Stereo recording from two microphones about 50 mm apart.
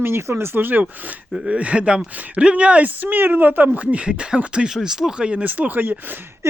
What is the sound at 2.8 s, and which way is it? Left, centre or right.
Speech, right.